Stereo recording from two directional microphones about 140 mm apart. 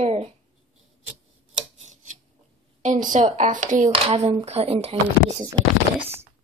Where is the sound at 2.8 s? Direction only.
65° right (ahead or behind).